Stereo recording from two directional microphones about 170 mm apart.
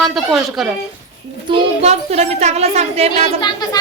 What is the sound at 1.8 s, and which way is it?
Speech, 40° right (ahead or behind).